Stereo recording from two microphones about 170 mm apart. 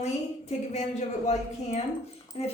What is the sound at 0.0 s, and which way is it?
A woman's voice, 40° left (ahead or behind).